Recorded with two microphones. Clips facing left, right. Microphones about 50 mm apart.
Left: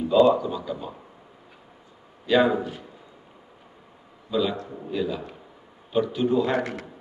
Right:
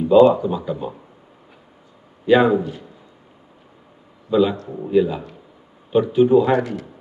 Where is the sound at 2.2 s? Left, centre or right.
Right.